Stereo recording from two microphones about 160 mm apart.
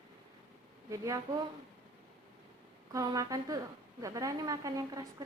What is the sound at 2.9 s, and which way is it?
A woman's voice, 20° right (ahead or behind).